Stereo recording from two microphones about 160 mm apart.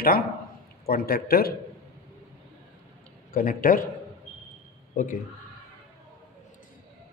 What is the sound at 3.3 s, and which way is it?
Speech, 60° left (ahead or behind).